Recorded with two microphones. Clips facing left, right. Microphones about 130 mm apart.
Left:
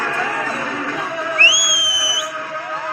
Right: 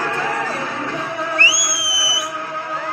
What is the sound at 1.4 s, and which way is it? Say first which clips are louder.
Music: left 1 dB; 30° right (ahead or behind).